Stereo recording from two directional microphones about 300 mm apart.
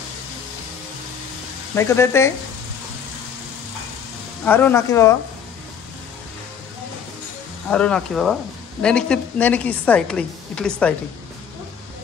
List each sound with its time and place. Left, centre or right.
1.8 s speech: centre
4.5 s speech: centre
7.7 s a woman's voice: centre